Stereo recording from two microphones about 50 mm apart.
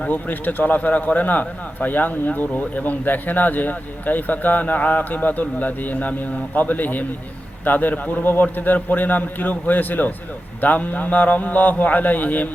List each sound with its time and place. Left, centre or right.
0.1 s a man's voice: left